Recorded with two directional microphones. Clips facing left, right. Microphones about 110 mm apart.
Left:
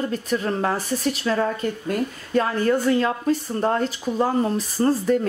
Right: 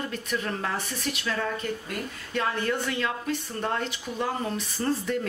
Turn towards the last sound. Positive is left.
turn(degrees=40)  # may be behind; listen again after turning